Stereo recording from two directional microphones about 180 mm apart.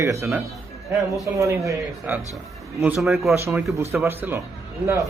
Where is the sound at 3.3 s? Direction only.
15° right (ahead or behind).